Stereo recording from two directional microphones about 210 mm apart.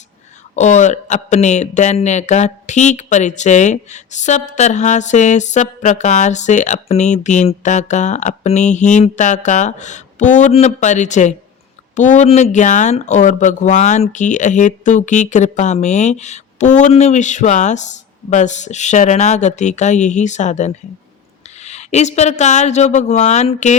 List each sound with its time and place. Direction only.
0.5 s speech: 35° left (ahead or behind)